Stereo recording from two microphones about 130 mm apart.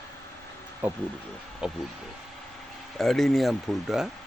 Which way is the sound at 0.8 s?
10° right (ahead or behind).